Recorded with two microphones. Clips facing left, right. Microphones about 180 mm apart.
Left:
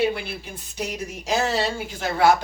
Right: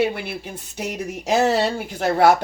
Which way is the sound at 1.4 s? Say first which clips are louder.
Right 5 dB; 60° right (ahead or behind).